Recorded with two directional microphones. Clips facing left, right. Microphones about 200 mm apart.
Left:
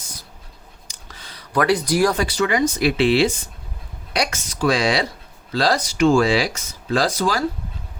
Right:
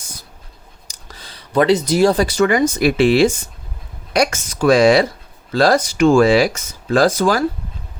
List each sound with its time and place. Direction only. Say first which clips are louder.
0.9 s clicking: right 3 dB; 35° right (ahead or behind)
2.1 s speech: right 5 dB; 45° right (ahead or behind)